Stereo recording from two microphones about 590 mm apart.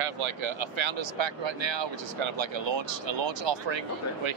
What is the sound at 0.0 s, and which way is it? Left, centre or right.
Speech, right.